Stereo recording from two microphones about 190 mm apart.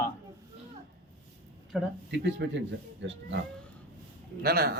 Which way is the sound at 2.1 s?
65° right (ahead or behind).